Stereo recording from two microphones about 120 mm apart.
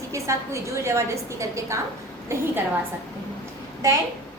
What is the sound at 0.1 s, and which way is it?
A woman's voice, 25° right (ahead or behind).